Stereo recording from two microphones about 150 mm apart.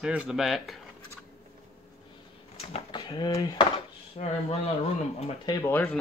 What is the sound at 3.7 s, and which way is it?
Speech, 45° left (ahead or behind).